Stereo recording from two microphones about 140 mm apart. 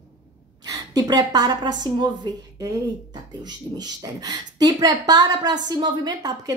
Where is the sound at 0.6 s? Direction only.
25° right (ahead or behind).